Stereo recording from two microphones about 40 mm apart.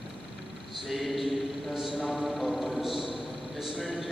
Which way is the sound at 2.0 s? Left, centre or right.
Right.